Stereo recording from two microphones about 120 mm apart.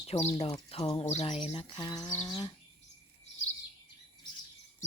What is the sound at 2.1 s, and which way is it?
Speech, 35° left (ahead or behind).